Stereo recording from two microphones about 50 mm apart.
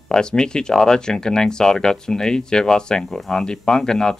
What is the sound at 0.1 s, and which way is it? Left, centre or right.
Speech, centre.